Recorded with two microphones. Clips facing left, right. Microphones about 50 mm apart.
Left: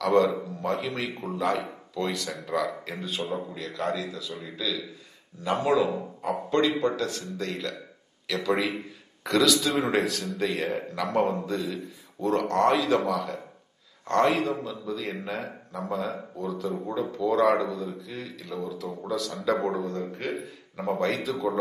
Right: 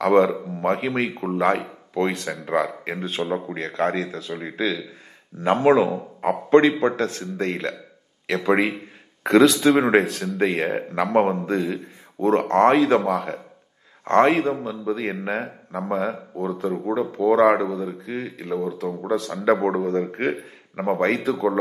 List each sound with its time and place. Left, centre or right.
0.0 s a man's voice: right